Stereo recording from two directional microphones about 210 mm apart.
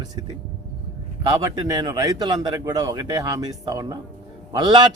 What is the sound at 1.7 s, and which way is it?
Speech, 20° right (ahead or behind).